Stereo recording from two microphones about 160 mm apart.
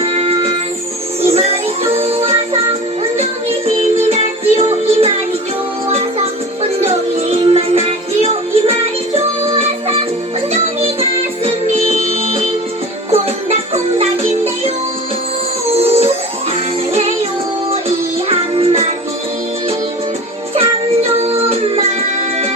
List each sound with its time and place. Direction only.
0.0 s music: 40° right (ahead or behind)
3.8 s music: 40° right (ahead or behind)
6.6 s music: 40° right (ahead or behind)
11.8 s music: 40° left (ahead or behind)
13.1 s music: 40° right (ahead or behind)
15.7 s music: 40° right (ahead or behind)
17.7 s music: 35° right (ahead or behind)
20.6 s music: 40° right (ahead or behind)